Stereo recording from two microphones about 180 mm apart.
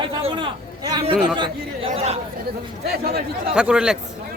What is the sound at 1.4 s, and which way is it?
Speech, 30° right (ahead or behind).